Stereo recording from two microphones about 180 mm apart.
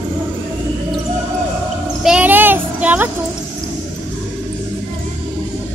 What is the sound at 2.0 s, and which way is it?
Child singing, 5° right (ahead or behind).